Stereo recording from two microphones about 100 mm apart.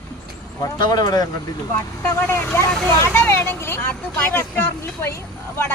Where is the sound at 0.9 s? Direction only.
40° left (ahead or behind).